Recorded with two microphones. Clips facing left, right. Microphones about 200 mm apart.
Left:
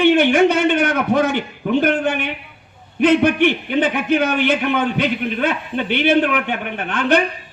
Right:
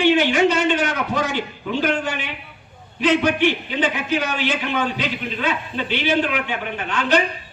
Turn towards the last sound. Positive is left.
turn(degrees=55)  # may be behind; listen again after turning